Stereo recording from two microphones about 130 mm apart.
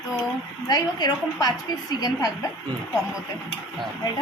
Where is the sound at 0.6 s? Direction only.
30° left (ahead or behind).